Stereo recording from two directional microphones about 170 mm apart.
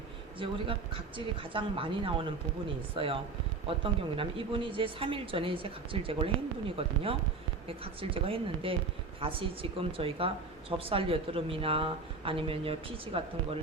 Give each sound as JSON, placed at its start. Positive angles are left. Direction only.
{"t": 0.3, "sound": "speech", "side_deg": -30}